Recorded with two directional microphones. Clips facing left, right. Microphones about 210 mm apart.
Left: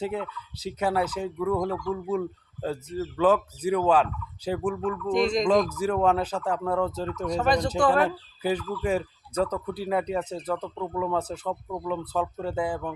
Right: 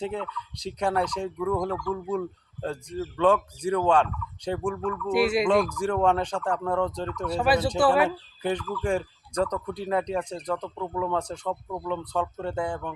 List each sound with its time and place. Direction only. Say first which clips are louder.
0.0 s speech: left 1 dB; 5° left (ahead or behind)
5.0 s speech: right 1 dB; 5° right (ahead or behind)
5.7 s speech: even; 5° left (ahead or behind)
7.3 s speech: right 1 dB; 5° right (ahead or behind)
8.4 s speech: left 1 dB; 5° left (ahead or behind)